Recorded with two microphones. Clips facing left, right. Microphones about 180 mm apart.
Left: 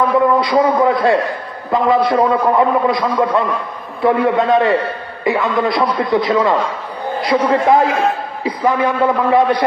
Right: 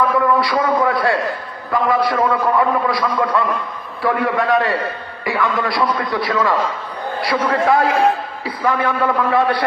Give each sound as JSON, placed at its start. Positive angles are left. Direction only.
{"t": 0.2, "sound": "a man's voice", "side_deg": 20}